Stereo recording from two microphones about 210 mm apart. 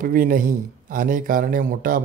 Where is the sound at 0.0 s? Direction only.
40° right (ahead or behind).